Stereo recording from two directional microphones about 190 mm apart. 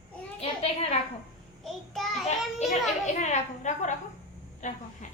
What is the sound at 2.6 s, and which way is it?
A child's voice, 40° left (ahead or behind).